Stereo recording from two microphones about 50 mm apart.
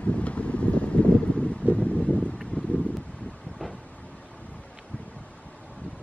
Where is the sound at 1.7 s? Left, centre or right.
Left.